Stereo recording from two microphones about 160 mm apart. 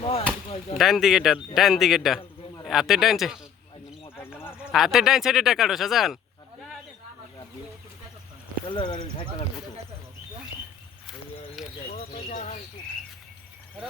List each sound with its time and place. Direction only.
0.0 s chop: 35° left (ahead or behind)
0.8 s speech: centre (ahead or behind)
4.2 s a sound: 15° left (ahead or behind)
4.5 s speech: centre (ahead or behind)
8.6 s speech: 30° left (ahead or behind)
11.6 s a sound: centre (ahead or behind)
11.9 s bird: 45° left (ahead or behind)